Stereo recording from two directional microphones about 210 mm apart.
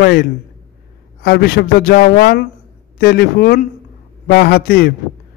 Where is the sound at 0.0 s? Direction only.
50° left (ahead or behind).